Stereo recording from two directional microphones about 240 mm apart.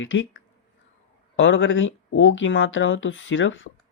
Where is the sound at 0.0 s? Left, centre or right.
Left.